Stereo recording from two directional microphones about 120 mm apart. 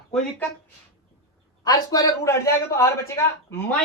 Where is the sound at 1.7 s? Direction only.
30° left (ahead or behind).